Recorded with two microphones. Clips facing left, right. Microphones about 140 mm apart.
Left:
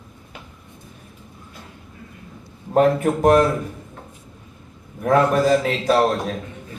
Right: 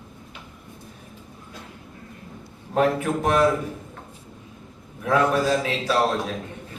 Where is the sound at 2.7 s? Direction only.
45° left (ahead or behind).